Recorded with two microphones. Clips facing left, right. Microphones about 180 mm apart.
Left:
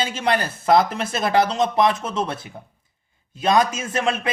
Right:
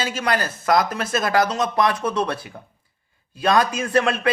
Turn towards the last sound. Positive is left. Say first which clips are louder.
# right 3 dB
turn(degrees=20)  # may be behind; listen again after turning